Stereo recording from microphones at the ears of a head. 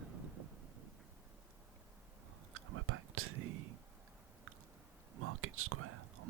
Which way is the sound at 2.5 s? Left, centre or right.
Right.